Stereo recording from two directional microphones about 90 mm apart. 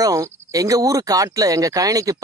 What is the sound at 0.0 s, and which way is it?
Speech, 40° right (ahead or behind).